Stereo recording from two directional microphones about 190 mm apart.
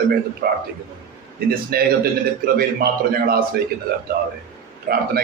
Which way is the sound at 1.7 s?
50° right (ahead or behind).